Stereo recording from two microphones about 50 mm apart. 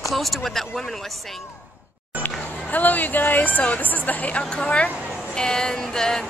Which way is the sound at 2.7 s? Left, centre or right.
Left.